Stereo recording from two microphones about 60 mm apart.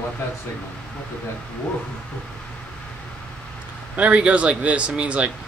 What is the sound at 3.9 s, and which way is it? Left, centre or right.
Speech, right.